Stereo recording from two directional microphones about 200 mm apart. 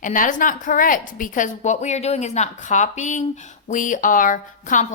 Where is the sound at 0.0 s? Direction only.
40° left (ahead or behind).